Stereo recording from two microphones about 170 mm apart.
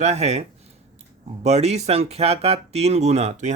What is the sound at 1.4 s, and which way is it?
Speech, 40° right (ahead or behind).